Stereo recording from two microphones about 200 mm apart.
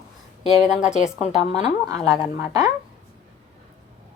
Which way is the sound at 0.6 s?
5° right (ahead or behind).